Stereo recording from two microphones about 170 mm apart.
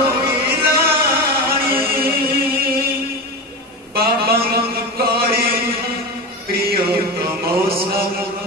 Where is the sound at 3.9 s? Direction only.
65° right (ahead or behind).